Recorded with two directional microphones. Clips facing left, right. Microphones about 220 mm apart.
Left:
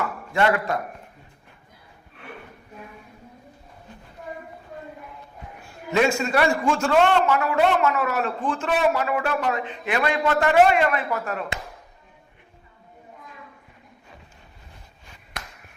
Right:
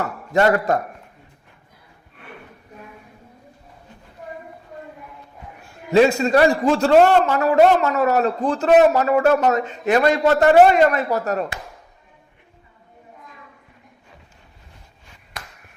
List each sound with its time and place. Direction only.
0.0 s a man's voice: 40° right (ahead or behind)
5.9 s a man's voice: 35° right (ahead or behind)